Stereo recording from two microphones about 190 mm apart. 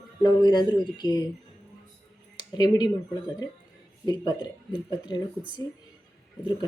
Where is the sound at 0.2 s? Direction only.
20° left (ahead or behind).